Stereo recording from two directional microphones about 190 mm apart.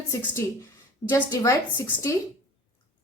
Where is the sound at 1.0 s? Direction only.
15° left (ahead or behind).